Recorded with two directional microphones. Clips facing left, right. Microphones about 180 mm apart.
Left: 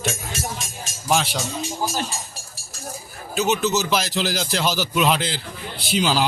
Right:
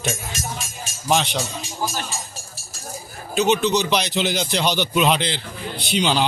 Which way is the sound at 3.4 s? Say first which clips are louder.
Right 2 dB; 5° left (ahead or behind).